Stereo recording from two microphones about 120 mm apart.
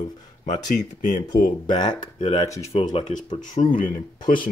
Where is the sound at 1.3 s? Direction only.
40° left (ahead or behind).